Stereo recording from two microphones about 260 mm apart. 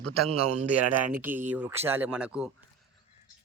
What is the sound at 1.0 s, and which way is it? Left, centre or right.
Speech, centre.